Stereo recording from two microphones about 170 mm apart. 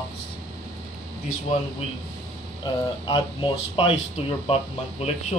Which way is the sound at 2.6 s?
30° left (ahead or behind).